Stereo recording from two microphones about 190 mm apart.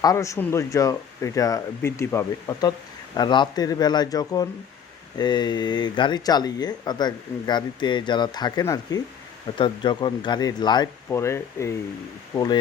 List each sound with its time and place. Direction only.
0.0 s speech: 15° left (ahead or behind)